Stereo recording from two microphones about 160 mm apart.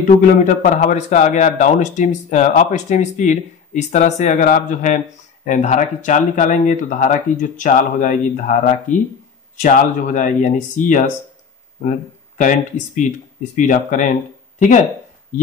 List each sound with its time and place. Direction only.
0.0 s a man's voice: 50° left (ahead or behind)
12.4 s a man's voice: 50° left (ahead or behind)